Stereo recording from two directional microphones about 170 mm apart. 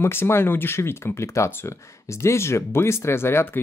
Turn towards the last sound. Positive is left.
turn(degrees=15)  # may be behind; listen again after turning